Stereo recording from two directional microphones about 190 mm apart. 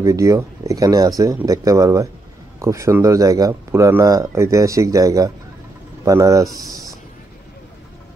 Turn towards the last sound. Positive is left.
turn(degrees=-15)  # may be behind; listen again after turning